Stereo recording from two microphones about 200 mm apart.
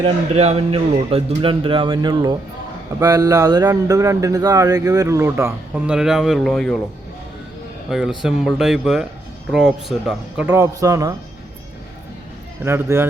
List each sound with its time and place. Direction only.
0.0 s speech: 30° right (ahead or behind); by 6.7 s centre (ahead or behind)
7.9 s speech: centre (ahead or behind)
12.6 s speech: 10° right (ahead or behind)